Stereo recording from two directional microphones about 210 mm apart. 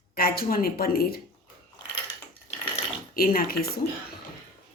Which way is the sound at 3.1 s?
45° left (ahead or behind).